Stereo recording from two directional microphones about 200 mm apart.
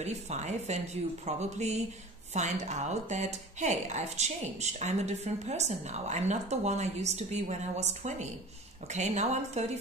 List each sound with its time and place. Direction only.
0.0 s speech: 35° right (ahead or behind)